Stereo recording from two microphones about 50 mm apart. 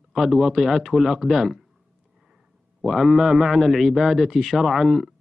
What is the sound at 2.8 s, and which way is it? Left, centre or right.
Speech, centre.